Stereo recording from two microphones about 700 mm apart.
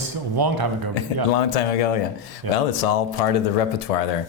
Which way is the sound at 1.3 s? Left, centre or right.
Left.